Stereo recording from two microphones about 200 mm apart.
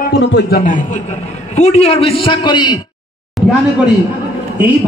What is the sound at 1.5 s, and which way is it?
A man's voice, 30° left (ahead or behind).